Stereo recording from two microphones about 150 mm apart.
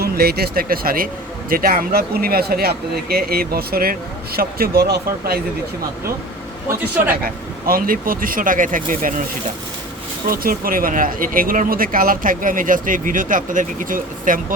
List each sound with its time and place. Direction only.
0.0 s a man's voice: 90° right
6.7 s speech: 15° right (ahead or behind)
7.7 s speech: 70° right (ahead or behind)
10.2 s speech: 75° right (ahead or behind)